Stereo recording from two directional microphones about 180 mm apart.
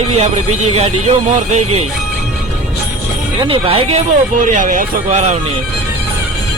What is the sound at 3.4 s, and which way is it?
Speech, 30° right (ahead or behind).